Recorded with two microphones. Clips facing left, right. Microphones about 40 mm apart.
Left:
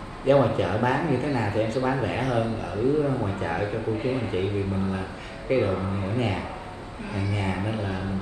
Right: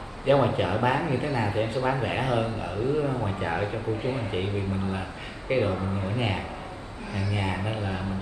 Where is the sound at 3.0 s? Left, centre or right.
Centre.